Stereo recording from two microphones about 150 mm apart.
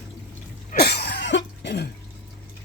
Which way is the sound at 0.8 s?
90° left.